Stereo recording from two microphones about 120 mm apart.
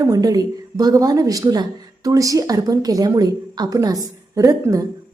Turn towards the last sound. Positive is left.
turn(degrees=-30)  # may be behind; listen again after turning